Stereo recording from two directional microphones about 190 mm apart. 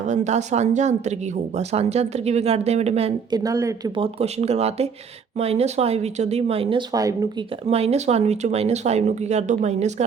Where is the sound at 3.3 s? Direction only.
20° right (ahead or behind).